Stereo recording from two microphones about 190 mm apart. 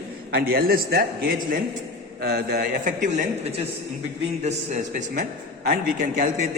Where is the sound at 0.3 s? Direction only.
55° right (ahead or behind).